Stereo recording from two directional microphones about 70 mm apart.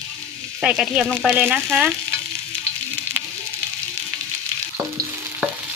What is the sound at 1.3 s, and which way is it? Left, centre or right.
Speech, right.